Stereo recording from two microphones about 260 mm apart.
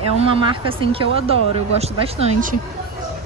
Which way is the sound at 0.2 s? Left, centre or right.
Right.